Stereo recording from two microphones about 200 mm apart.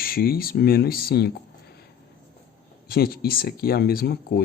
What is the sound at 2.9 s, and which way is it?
Speech, 50° left (ahead or behind).